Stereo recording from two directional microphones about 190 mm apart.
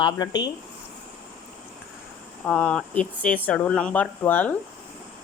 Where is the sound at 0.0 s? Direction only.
20° left (ahead or behind).